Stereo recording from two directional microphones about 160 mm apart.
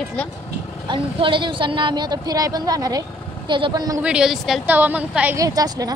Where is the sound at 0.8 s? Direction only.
30° right (ahead or behind).